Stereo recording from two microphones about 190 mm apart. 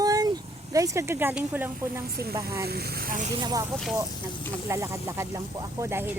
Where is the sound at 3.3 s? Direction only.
20° right (ahead or behind).